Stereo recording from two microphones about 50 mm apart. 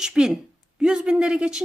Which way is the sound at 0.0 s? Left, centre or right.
Centre.